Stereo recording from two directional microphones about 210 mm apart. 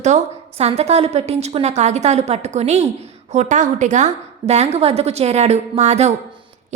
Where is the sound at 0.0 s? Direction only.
30° right (ahead or behind).